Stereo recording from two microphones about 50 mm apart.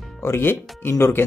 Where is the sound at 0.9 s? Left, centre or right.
Left.